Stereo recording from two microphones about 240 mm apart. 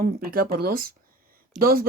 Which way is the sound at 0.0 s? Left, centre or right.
Right.